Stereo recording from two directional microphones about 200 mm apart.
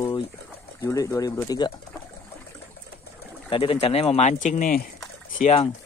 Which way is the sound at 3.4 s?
25° left (ahead or behind).